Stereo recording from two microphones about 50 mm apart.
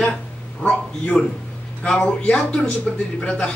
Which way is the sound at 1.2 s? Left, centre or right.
Centre.